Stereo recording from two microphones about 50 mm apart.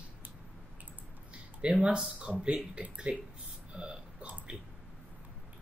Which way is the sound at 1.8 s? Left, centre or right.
Centre.